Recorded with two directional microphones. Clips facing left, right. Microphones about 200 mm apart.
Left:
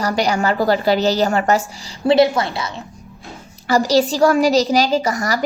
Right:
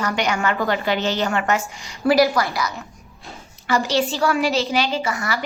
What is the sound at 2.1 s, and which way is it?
A woman's voice, 25° left (ahead or behind).